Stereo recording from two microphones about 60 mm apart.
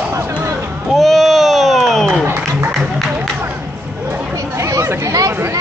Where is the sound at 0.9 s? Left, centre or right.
Centre.